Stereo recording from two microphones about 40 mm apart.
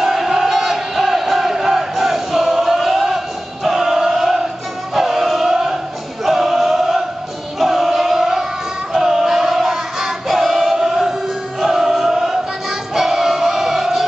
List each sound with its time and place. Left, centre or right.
0.0 s crowd: centre
3.6 s chant: centre
4.9 s choir: centre
7.5 s crowd: centre
8.9 s music: centre